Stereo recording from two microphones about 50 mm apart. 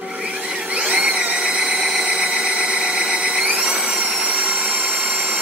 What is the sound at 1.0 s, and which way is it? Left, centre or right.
Tools, right.